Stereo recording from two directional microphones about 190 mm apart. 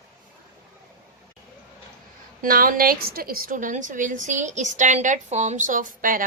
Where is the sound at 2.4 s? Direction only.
45° right (ahead or behind).